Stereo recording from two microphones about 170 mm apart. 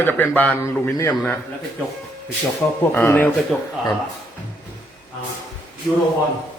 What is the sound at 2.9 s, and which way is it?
Speech, 15° left (ahead or behind).